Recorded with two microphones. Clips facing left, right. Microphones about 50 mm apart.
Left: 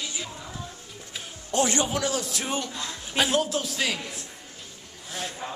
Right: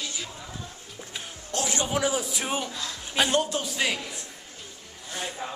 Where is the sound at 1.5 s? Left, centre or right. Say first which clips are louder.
Left 6 dB; centre.